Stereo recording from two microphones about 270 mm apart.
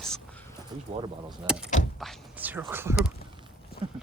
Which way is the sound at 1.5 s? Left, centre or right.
Centre.